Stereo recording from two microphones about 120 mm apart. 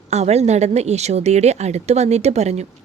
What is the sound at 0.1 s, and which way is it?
A woman's voice, 65° right (ahead or behind).